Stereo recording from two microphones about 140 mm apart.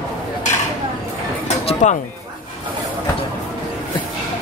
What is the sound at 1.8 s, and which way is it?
Speech, 60° left (ahead or behind).